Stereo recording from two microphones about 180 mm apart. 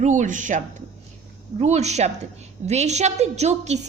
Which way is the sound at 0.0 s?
45° right (ahead or behind).